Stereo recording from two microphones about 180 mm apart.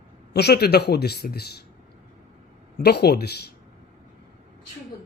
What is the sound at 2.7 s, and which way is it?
Speech, 65° left (ahead or behind).